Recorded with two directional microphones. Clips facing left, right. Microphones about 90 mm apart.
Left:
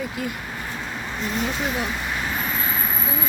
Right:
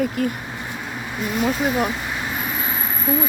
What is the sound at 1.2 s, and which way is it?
Speech, 5° right (ahead or behind).